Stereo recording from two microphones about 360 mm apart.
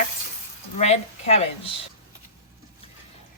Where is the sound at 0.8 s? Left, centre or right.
Centre.